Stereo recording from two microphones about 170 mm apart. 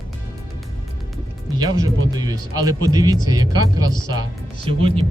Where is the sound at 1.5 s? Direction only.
20° right (ahead or behind).